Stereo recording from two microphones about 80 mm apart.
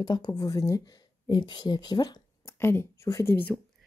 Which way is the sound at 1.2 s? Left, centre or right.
Left.